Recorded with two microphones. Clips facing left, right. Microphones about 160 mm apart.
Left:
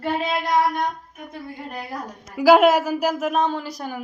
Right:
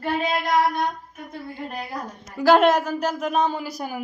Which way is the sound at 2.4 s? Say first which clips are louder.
Left 2 dB; 5° left (ahead or behind).